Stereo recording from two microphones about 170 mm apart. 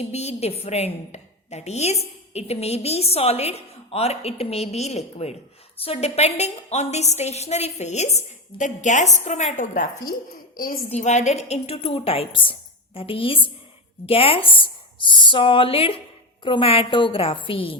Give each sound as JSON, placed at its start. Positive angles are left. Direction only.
{"t": 0.0, "sound": "a woman's voice", "side_deg": 40}
{"t": 10.9, "sound": "a woman's voice", "side_deg": 45}